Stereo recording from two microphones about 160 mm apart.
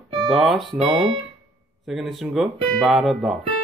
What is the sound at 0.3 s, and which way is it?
Speech, centre (ahead or behind).